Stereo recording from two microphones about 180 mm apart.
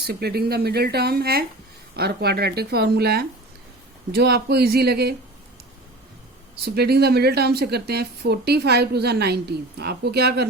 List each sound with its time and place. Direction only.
0.0 s speech: 65° right (ahead or behind)
6.7 s speech: 60° right (ahead or behind)